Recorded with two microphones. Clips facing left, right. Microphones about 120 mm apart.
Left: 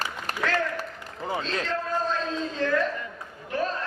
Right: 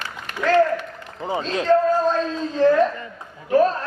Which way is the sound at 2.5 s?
35° right (ahead or behind).